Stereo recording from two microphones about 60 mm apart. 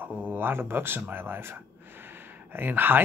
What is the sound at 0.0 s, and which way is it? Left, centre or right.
Speech, right.